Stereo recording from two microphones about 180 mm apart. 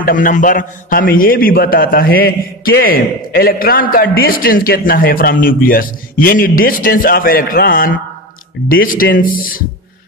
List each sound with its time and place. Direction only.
0.0 s a man's voice: 45° left (ahead or behind)